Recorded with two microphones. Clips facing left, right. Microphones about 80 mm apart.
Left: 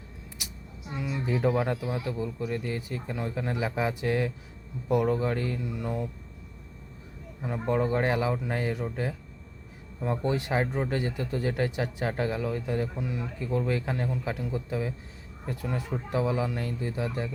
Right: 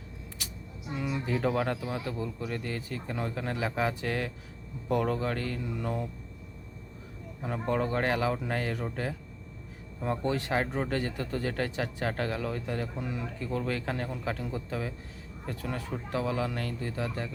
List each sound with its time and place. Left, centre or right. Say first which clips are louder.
0.9 s a sound: even; centre
1.2 s speech: left 3 dB; centre
5.6 s speech: left 1 dB; centre
7.5 s speech: left 3 dB; centre
10.2 s speech: left 2 dB; centre